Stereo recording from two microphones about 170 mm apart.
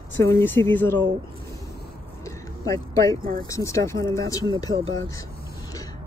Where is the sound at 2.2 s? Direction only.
20° left (ahead or behind).